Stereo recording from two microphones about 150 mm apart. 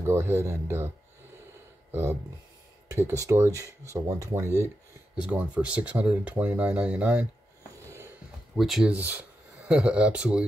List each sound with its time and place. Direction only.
0.0 s speech: 15° right (ahead or behind)
1.9 s speech: 15° right (ahead or behind)
5.1 s speech: 10° right (ahead or behind)
7.8 s a sound: 20° right (ahead or behind)
8.5 s speech: centre (ahead or behind)